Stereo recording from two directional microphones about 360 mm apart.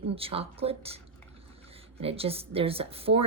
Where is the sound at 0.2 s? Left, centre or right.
Centre.